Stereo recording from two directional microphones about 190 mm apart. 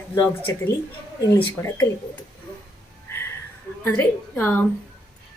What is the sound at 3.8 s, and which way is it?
Speech, 10° left (ahead or behind).